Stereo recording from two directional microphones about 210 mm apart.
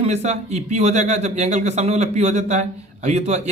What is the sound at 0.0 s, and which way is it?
Speech, 30° right (ahead or behind).